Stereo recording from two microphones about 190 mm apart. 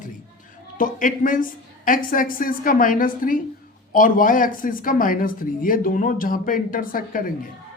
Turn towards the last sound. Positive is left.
turn(degrees=45)  # may be behind; listen again after turning